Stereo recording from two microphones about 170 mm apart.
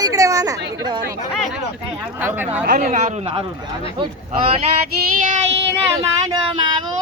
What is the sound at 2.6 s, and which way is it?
Speech, 55° right (ahead or behind).